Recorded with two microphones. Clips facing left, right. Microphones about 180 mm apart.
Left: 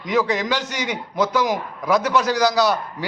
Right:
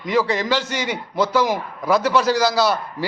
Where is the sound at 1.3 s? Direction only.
5° right (ahead or behind).